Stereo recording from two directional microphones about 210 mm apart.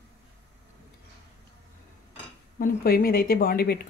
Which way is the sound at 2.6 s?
45° left (ahead or behind).